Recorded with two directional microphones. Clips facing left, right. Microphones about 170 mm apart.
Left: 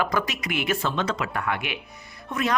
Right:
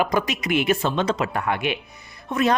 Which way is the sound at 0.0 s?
15° right (ahead or behind).